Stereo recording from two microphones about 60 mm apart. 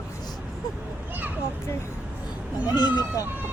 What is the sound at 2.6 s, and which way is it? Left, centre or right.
Speech, left.